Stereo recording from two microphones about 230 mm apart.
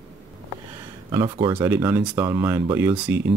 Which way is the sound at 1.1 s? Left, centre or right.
Centre.